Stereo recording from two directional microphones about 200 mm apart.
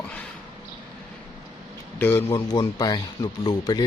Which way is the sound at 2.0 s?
10° left (ahead or behind).